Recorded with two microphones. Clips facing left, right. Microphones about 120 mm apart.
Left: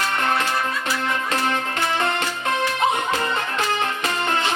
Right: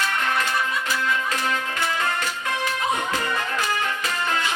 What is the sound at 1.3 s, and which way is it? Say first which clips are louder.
Music: left 3 dB; 25° left (ahead or behind).